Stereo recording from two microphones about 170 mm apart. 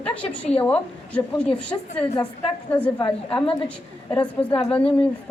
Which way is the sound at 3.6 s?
10° left (ahead or behind).